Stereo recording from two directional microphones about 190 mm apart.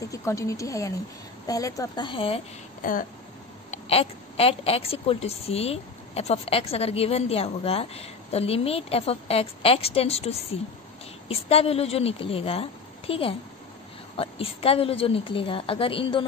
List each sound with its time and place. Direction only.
0.1 s a woman's voice: 15° left (ahead or behind)
2.8 s speech: 45° left (ahead or behind)
3.7 s a woman's voice: 30° left (ahead or behind)